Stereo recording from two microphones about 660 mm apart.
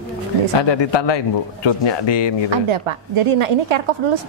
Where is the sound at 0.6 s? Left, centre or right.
Left.